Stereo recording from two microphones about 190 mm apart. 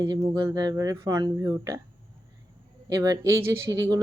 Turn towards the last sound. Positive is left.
turn(degrees=-15)  # may be behind; listen again after turning